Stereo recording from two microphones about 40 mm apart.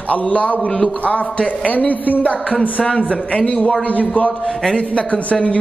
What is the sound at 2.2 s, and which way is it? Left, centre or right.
Speech, left.